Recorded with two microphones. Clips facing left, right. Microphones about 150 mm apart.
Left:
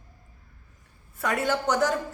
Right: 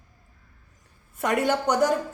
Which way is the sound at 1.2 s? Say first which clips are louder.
Right 3 dB; 20° right (ahead or behind).